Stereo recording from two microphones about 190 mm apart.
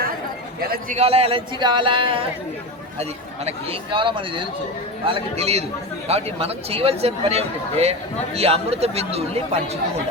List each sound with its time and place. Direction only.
0.9 s speech: 30° right (ahead or behind)